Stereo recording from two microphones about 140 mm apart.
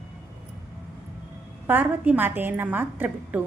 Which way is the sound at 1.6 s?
10° right (ahead or behind).